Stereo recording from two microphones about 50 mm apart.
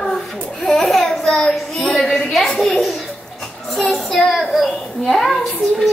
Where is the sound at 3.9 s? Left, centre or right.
Centre.